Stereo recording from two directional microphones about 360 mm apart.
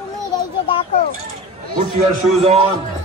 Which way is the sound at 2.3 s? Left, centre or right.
Centre.